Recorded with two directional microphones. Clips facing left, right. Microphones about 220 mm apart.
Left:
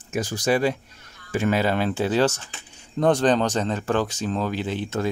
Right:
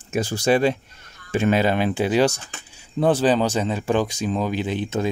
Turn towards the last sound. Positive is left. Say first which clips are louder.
# right 2 dB
turn(degrees=-20)  # may be behind; listen again after turning